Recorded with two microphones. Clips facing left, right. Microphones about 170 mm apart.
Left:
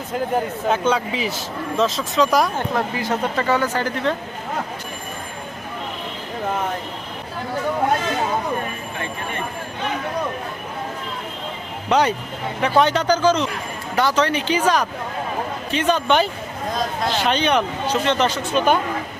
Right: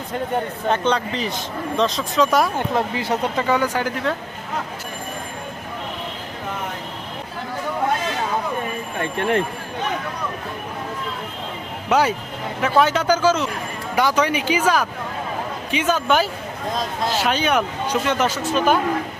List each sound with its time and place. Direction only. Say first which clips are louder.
0.1 s a man's voice: left 2 dB; 5° left (ahead or behind)
2.6 s speech: right 1 dB; 20° right (ahead or behind)
3.4 s speech: even; 10° right (ahead or behind)
9.1 s speech: right 10 dB; 80° right
11.9 s speech: even; 5° right (ahead or behind)
15.7 s a man's voice: left 1 dB; 5° right (ahead or behind)